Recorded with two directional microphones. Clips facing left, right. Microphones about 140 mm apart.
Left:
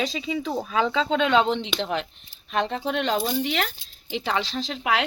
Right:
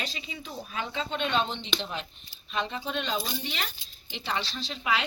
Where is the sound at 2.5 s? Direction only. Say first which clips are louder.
Left 7 dB; 65° left (ahead or behind).